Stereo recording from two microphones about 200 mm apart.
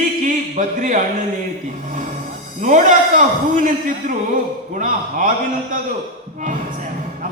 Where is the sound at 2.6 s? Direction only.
40° right (ahead or behind).